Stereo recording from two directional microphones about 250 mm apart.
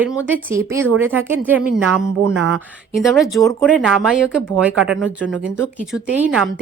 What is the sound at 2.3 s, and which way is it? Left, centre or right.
Speech, right.